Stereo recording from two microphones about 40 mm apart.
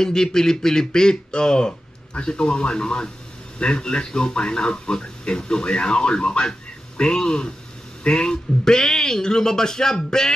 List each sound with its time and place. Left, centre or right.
0.0 s speech: centre